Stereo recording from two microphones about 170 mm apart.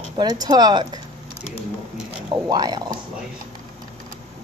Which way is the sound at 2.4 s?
25° right (ahead or behind).